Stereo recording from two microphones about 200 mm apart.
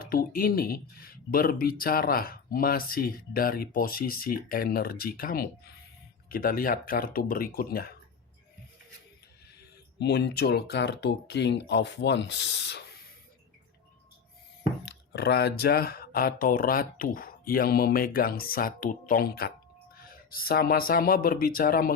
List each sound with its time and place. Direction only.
0.0 s speech: 45° left (ahead or behind)
10.0 s speech: 55° left (ahead or behind)
15.1 s speech: 55° left (ahead or behind)